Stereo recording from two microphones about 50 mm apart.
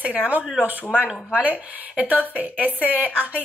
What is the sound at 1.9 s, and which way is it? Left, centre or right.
Speech, right.